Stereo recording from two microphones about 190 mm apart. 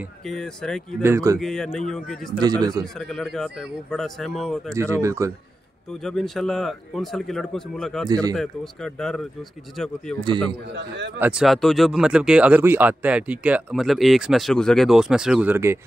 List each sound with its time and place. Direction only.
0.3 s speech: centre (ahead or behind)
1.0 s speech: 15° right (ahead or behind)
1.4 s speech: centre (ahead or behind)
2.3 s a man's voice: 20° right (ahead or behind)
3.1 s speech: centre (ahead or behind)
4.7 s speech: 15° right (ahead or behind)
6.0 s speech: centre (ahead or behind)
8.1 s a man's voice: 20° right (ahead or behind)
8.4 s speech: centre (ahead or behind)
10.7 s a man's voice: 65° right (ahead or behind)
11.1 s speech: 5° right (ahead or behind)